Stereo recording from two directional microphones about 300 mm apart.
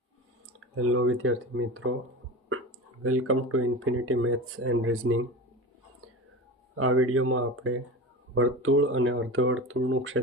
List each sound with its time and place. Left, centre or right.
0.8 s speech: right
3.0 s speech: right
6.7 s speech: right